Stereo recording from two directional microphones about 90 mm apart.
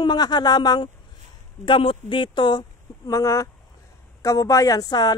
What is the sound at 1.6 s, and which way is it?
Speech, 75° left (ahead or behind).